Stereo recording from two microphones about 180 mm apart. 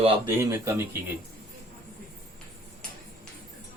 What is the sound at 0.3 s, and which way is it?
Speech, 15° right (ahead or behind).